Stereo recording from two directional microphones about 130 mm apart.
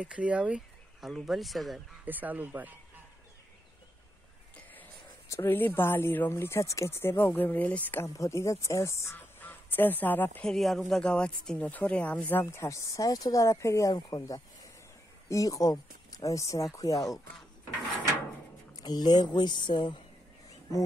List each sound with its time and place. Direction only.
0.0 s speech: 10° right (ahead or behind)
2.0 s speech: 15° right (ahead or behind)
5.3 s speech: 15° left (ahead or behind)
10.5 s speech: centre (ahead or behind); by 17.0 s 25° left (ahead or behind)
18.8 s speech: 35° left (ahead or behind)